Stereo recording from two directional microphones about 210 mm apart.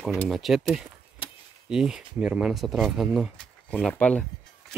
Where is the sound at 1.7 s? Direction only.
5° right (ahead or behind).